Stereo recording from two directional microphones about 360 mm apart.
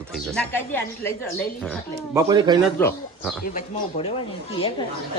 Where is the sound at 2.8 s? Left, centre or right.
Centre.